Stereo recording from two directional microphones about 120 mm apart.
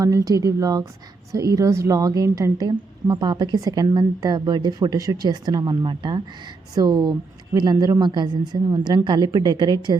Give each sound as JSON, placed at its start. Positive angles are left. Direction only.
{"t": 0.0, "sound": "a woman's voice", "side_deg": -30}